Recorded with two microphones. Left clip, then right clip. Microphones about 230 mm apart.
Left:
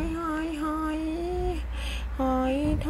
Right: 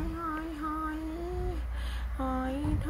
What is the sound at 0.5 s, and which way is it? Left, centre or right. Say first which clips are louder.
Music: left 5 dB; centre.